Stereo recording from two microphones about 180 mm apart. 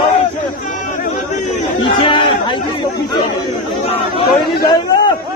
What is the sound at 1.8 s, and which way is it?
Chatter, 30° left (ahead or behind).